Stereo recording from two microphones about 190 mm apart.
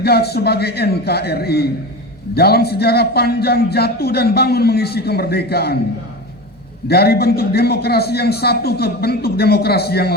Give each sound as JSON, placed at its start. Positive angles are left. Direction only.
{"t": 0.0, "sound": "a man's voice", "side_deg": 55}
{"t": 6.8, "sound": "a man's voice", "side_deg": 55}